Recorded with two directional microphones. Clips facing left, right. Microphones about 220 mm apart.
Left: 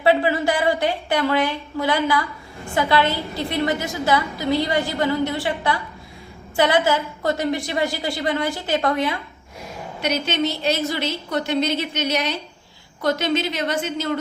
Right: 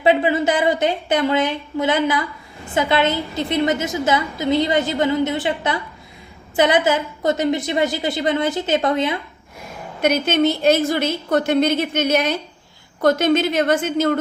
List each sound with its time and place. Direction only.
0.0 s a woman's voice: 20° right (ahead or behind)
10.0 s a woman's voice: 50° right (ahead or behind)